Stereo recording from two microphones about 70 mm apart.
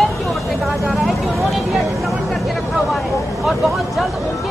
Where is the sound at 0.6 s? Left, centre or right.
Centre.